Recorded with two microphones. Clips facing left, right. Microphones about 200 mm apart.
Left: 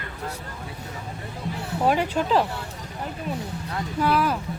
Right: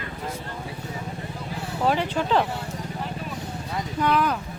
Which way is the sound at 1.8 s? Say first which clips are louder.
Left 1 dB; 10° left (ahead or behind).